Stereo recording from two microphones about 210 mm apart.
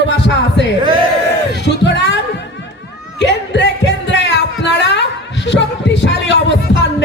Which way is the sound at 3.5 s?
55° left (ahead or behind).